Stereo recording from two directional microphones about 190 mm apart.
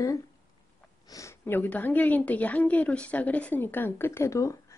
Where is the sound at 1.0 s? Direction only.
15° left (ahead or behind).